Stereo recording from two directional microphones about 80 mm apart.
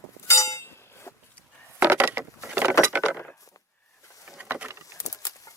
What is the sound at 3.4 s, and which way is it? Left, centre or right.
Chop, left.